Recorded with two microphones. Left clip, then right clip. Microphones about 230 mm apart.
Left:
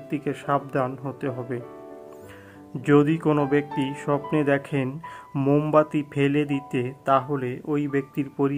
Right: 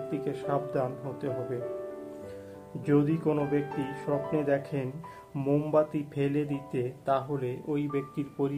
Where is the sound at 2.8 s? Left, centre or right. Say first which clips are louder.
Left 7 dB; left.